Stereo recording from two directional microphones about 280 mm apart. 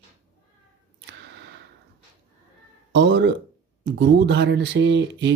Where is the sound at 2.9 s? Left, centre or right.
Right.